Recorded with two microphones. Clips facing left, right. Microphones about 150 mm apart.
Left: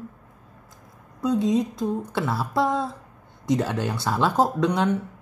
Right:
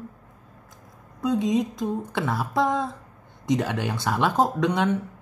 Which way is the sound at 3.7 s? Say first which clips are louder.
Left 1 dB; 15° right (ahead or behind).